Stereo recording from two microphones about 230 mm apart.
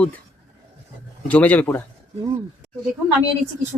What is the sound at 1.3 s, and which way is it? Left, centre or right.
Speech, centre.